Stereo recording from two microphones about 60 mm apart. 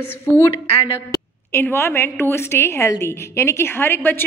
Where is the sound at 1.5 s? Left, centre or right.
Left.